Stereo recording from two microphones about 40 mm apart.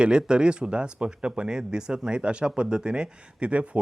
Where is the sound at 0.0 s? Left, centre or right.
Right.